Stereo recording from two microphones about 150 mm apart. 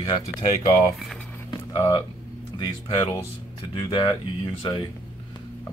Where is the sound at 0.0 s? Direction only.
25° left (ahead or behind).